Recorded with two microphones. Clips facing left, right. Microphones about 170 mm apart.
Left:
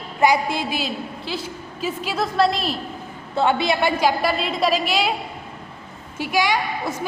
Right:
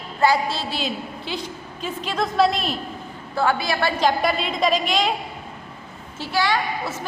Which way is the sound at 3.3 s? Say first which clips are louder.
Left 2 dB; 25° left (ahead or behind).